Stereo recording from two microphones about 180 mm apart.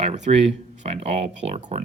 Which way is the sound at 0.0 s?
35° right (ahead or behind).